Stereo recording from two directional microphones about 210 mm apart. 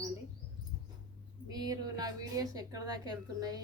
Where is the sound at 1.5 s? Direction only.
20° right (ahead or behind).